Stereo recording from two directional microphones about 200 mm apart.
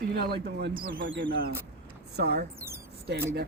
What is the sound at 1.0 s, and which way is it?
Speech, 65° right (ahead or behind).